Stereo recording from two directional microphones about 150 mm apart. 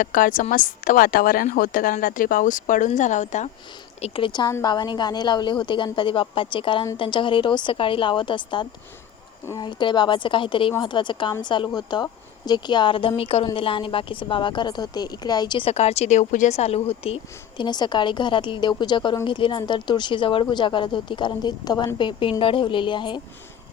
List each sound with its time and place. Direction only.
0.0 s a woman's voice: 65° left (ahead or behind)
4.0 s speech: 35° left (ahead or behind)
15.7 s speech: 45° left (ahead or behind)
17.6 s speech: 30° left (ahead or behind)